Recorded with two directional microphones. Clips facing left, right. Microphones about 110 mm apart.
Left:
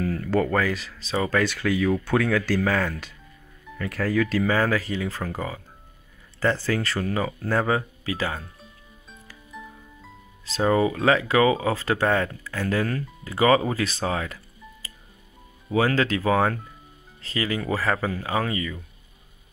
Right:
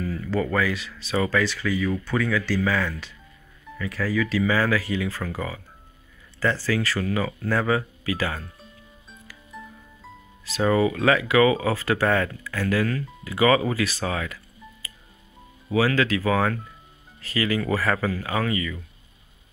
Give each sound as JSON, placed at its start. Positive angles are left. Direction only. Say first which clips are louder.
{"t": 0.0, "sound": "speech", "louder": "left 3 dB", "side_deg": 60}
{"t": 1.3, "sound": "speech", "louder": "left 1 dB", "side_deg": 50}
{"t": 4.7, "sound": "speech", "louder": "right 1 dB", "side_deg": 25}
{"t": 10.6, "sound": "speech", "louder": "even", "side_deg": 20}
{"t": 15.7, "sound": "speech", "louder": "even", "side_deg": 30}